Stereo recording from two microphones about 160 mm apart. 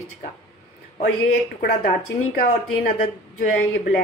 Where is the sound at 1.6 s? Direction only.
75° left (ahead or behind).